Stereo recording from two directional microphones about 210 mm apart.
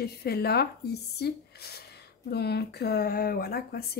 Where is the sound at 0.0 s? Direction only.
50° left (ahead or behind).